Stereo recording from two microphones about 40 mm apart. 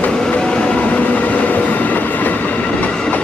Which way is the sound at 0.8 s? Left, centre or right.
Left.